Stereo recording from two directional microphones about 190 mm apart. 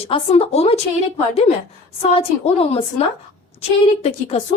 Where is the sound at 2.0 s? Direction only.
30° left (ahead or behind).